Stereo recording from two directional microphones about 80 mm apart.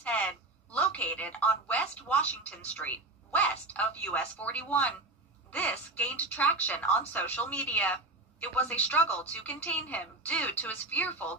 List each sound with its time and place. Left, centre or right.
0.0 s a woman's voice: centre